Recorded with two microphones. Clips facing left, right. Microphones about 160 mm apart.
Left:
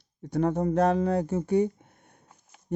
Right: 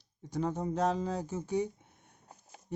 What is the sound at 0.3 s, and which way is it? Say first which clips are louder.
Speech: left 8 dB; 60° left (ahead or behind).